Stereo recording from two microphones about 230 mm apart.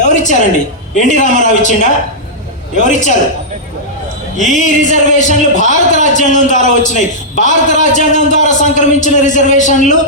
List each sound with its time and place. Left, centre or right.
0.0 s a sound: left
0.9 s a man's voice: left
4.4 s a man's voice: left